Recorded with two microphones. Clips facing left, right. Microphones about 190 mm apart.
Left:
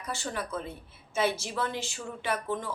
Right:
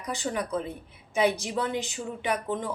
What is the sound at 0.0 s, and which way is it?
A woman's voice, 15° right (ahead or behind).